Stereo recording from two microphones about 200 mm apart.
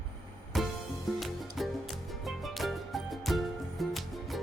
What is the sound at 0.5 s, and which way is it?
Music, centre (ahead or behind).